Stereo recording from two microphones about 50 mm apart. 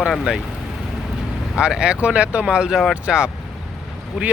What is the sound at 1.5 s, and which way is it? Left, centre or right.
Speech, centre.